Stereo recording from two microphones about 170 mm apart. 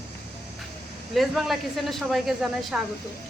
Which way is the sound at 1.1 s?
Centre (ahead or behind).